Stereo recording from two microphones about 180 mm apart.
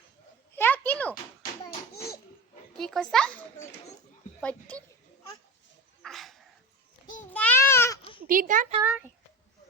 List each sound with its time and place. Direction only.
0.5 s a sound: 10° left (ahead or behind)
2.7 s a child's voice: 5° left (ahead or behind)
6.0 s dog: centre (ahead or behind)
7.3 s babbling: 10° left (ahead or behind)
8.3 s a woman's voice: 50° right (ahead or behind)
8.8 s speech: 10° right (ahead or behind)